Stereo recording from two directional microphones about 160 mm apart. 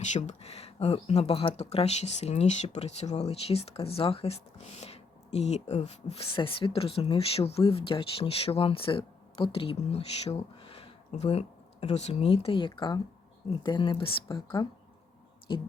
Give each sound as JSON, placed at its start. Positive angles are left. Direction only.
{"t": 0.1, "sound": "speech", "side_deg": 45}